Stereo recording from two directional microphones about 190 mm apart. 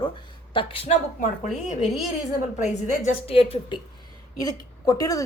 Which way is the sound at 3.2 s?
30° left (ahead or behind).